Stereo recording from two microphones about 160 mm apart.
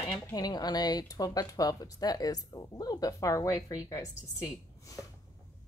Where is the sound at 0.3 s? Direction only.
25° left (ahead or behind).